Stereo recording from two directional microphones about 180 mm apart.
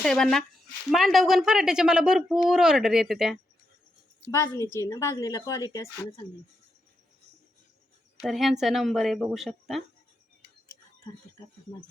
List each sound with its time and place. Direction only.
0.0 s a woman's voice: centre (ahead or behind)
4.4 s a woman's voice: 15° left (ahead or behind)
8.2 s a woman's voice: centre (ahead or behind)